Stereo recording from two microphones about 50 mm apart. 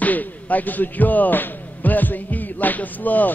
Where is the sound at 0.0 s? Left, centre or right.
Left.